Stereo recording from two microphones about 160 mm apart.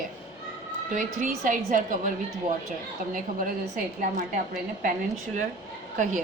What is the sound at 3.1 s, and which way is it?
A woman's voice, 55° right (ahead or behind).